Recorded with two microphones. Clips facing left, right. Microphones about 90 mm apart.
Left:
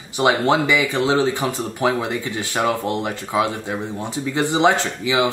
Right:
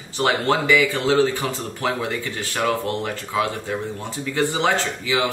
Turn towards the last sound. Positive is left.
turn(degrees=20)  # may be behind; listen again after turning